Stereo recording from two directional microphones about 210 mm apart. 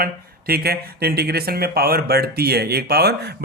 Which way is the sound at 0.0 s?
45° right (ahead or behind).